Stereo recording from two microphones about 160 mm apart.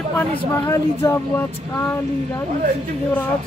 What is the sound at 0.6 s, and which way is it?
Speech, 20° left (ahead or behind).